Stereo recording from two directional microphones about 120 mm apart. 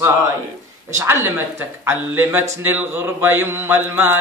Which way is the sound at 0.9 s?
20° right (ahead or behind).